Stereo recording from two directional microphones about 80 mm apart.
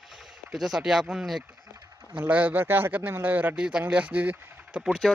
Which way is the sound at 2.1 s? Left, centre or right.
Centre.